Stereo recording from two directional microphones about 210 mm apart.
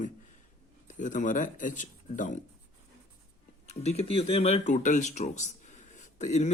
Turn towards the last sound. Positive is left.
turn(degrees=35)  # may be behind; listen again after turning